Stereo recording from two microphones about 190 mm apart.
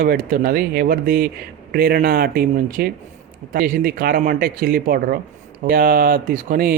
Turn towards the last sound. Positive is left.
turn(degrees=-50)  # may be behind; listen again after turning